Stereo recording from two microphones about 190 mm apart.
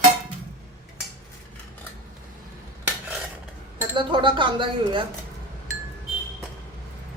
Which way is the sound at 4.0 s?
25° right (ahead or behind).